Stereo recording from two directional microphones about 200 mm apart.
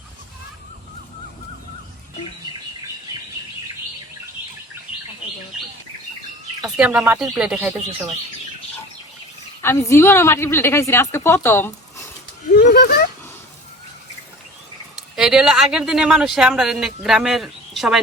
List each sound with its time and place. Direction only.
6.6 s speech: 5° right (ahead or behind)
9.6 s a woman's voice: 15° left (ahead or behind)
12.5 s speech: 55° left (ahead or behind)
15.1 s speech: 5° right (ahead or behind)